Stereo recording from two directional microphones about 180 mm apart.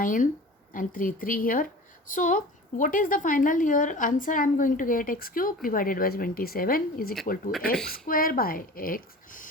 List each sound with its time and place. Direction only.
0.0 s a woman's voice: 45° left (ahead or behind)